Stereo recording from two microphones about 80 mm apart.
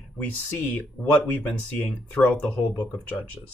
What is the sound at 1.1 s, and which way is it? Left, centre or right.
Speech, centre.